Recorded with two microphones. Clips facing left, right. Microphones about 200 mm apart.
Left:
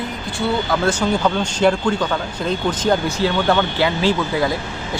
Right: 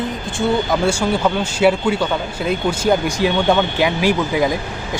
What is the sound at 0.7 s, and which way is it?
Speech, 10° right (ahead or behind).